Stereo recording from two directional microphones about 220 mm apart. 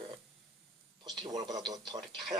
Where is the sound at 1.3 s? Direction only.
15° right (ahead or behind).